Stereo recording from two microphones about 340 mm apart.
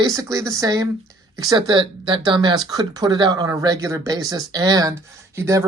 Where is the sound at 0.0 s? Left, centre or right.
Centre.